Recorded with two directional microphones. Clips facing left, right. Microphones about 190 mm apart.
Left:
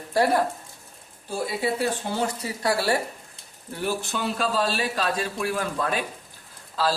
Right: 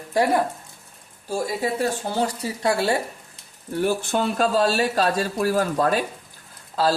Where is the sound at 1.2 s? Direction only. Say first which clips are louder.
Right 3 dB; 40° right (ahead or behind).